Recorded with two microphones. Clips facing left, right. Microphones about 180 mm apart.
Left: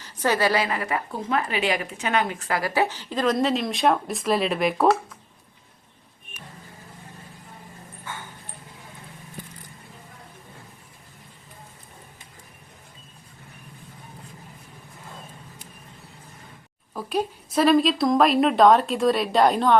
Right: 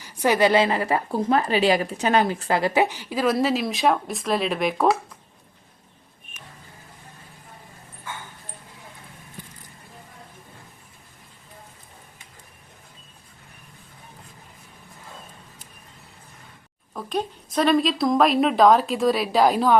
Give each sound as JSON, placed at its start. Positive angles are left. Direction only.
{"t": 0.0, "sound": "a woman's voice", "side_deg": -15}
{"t": 16.9, "sound": "a woman's voice", "side_deg": 5}